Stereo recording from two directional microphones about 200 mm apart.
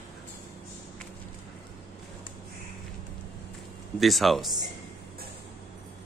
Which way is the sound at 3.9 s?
Centre (ahead or behind).